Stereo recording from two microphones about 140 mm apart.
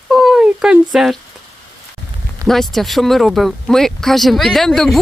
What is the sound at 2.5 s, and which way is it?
Speech, centre (ahead or behind).